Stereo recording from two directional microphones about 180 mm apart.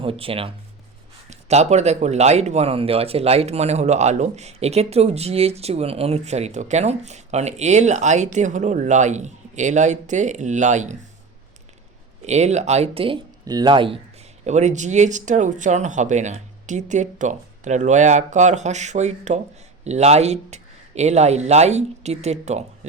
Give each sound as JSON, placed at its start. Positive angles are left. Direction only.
{"t": 0.0, "sound": "speech", "side_deg": -30}
{"t": 12.2, "sound": "speech", "side_deg": -40}
{"t": 13.4, "sound": "speech", "side_deg": -20}
{"t": 14.4, "sound": "speech", "side_deg": -40}